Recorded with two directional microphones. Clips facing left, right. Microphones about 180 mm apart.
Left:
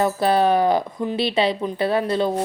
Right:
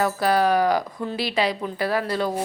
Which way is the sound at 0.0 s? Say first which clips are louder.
Left 2 dB; 25° left (ahead or behind).